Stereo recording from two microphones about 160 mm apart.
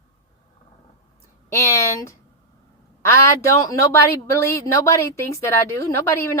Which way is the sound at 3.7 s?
20° left (ahead or behind).